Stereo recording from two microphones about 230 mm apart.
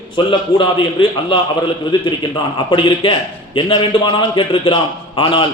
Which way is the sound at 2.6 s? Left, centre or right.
Left.